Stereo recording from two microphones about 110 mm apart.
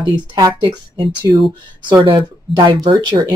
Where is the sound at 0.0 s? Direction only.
45° right (ahead or behind).